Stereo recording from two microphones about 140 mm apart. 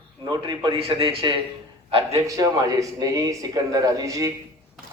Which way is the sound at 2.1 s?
25° right (ahead or behind).